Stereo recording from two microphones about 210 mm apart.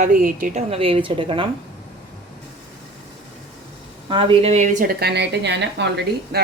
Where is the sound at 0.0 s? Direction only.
45° right (ahead or behind); by 1.5 s 25° right (ahead or behind).